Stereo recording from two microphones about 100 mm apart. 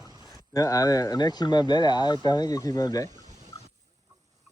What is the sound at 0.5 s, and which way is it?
Speech, 35° left (ahead or behind).